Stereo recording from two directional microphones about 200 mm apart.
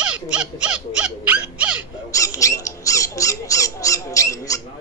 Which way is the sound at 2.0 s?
15° left (ahead or behind).